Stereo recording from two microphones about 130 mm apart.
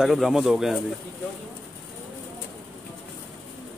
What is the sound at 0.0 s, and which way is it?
Speech, centre (ahead or behind).